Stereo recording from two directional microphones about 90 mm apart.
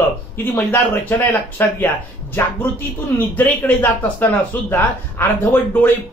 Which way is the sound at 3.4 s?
20° left (ahead or behind).